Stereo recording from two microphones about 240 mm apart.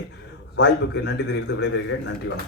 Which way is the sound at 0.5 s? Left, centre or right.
Left.